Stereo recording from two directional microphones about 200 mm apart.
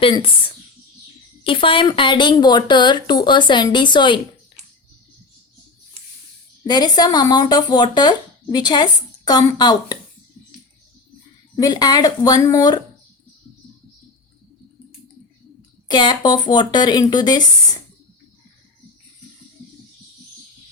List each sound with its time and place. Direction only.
0.0 s speech: 25° left (ahead or behind)
6.7 s speech: 20° left (ahead or behind)
11.5 s speech: 20° left (ahead or behind)
15.9 s speech: 20° left (ahead or behind)